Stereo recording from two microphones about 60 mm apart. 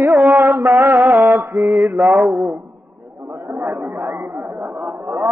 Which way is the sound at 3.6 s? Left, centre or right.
Right.